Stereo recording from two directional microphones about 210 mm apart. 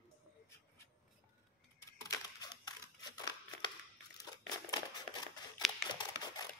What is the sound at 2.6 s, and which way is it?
Scissors, 20° left (ahead or behind).